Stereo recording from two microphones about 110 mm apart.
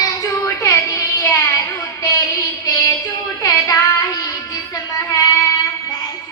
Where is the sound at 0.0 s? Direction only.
25° left (ahead or behind).